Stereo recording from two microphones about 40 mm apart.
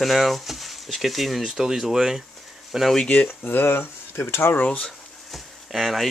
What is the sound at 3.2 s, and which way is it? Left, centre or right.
Speech, left.